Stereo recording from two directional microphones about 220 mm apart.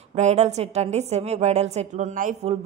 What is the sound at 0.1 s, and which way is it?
A woman's voice, 30° right (ahead or behind).